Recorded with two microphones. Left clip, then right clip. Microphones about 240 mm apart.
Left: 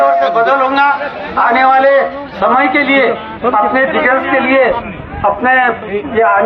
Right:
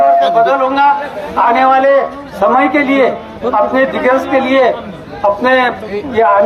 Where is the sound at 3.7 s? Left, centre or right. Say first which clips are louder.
Even; right.